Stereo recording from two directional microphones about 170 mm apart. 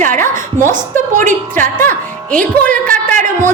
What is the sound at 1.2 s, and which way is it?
Speech, 50° right (ahead or behind).